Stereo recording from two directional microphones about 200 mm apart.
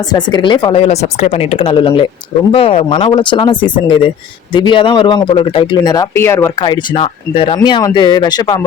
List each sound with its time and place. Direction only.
0.0 s speech: 20° left (ahead or behind)